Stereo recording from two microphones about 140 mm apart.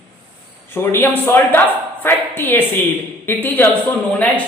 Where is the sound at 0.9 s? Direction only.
15° left (ahead or behind).